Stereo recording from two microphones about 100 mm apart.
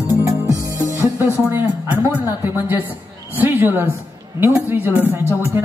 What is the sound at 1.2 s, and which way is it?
Speech, 20° right (ahead or behind).